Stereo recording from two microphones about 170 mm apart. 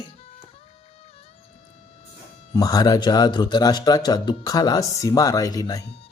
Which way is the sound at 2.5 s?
20° left (ahead or behind).